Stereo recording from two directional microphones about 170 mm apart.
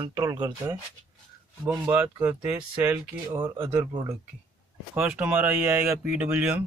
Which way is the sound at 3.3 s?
25° right (ahead or behind).